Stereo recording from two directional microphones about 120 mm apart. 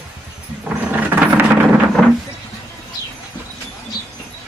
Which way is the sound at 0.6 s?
10° right (ahead or behind).